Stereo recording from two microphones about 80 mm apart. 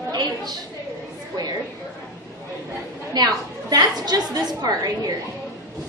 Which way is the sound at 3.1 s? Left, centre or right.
Right.